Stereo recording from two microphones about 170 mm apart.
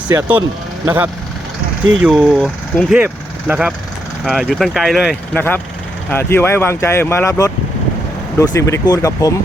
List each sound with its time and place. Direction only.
0.1 s speech: 15° right (ahead or behind)
5.3 s speech: 10° left (ahead or behind)
8.5 s speech: 20° left (ahead or behind)